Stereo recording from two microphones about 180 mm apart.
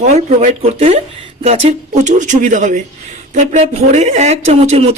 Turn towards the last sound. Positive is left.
turn(degrees=-35)  # may be behind; listen again after turning